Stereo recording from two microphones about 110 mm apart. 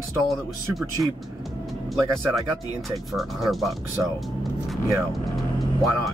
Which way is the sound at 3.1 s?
Centre (ahead or behind).